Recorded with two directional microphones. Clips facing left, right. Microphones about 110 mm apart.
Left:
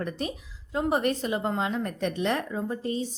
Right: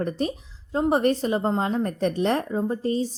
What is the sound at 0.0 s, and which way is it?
A woman's voice, 35° right (ahead or behind).